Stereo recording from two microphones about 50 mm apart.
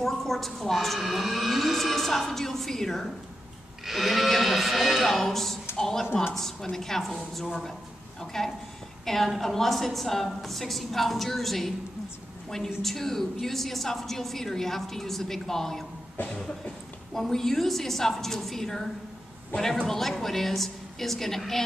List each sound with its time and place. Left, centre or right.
0.0 s a woman's voice: centre
12.8 s a woman's voice: centre